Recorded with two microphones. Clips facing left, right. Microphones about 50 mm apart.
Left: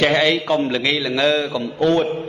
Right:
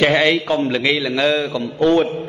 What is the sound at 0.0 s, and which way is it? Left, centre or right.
A man's voice, centre.